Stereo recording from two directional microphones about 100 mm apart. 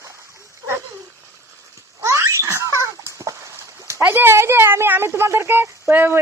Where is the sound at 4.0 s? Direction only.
20° right (ahead or behind).